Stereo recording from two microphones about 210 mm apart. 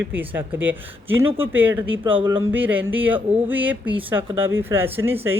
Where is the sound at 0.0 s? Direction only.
10° right (ahead or behind).